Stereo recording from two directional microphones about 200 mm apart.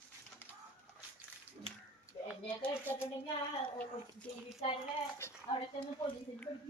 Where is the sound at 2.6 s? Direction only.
10° left (ahead or behind).